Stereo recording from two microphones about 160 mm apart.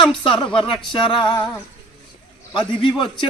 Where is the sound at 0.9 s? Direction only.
30° left (ahead or behind).